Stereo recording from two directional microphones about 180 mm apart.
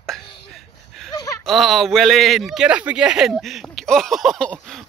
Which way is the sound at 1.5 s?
Centre (ahead or behind).